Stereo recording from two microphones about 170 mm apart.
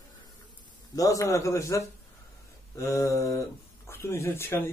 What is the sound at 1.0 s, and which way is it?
A man's voice, 20° left (ahead or behind).